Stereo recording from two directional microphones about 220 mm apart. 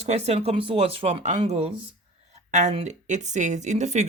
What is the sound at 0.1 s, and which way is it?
Speech, 30° right (ahead or behind).